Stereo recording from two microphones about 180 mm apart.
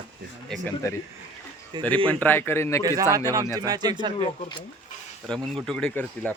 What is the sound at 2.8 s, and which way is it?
Speech, 20° right (ahead or behind).